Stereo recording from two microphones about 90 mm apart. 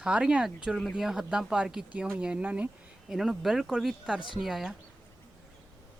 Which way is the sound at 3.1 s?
5° right (ahead or behind).